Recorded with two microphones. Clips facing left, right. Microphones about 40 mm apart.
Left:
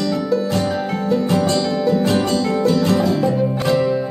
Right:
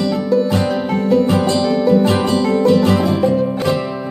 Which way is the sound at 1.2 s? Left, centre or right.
Centre.